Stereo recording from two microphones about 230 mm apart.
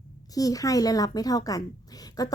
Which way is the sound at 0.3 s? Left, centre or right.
Centre.